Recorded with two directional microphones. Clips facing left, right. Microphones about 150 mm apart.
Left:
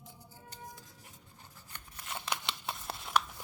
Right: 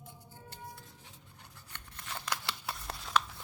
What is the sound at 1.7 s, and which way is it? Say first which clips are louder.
Scissors: left 1 dB; 10° left (ahead or behind).